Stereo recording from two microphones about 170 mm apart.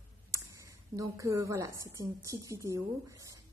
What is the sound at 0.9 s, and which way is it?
A woman's voice, 20° right (ahead or behind).